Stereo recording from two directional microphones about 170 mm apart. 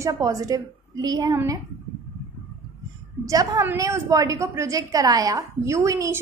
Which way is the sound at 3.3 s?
20° right (ahead or behind).